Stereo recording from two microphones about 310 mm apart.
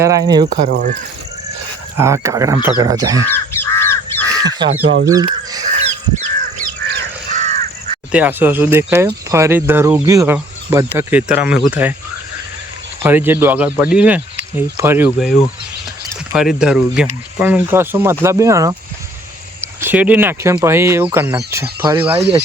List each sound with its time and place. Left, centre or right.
0.0 s speech: centre
0.5 s speech: right
2.0 s speech: centre
3.2 s crow: centre
4.4 s speech: centre
5.0 s goose: centre
8.1 s speech: centre
13.0 s speech: centre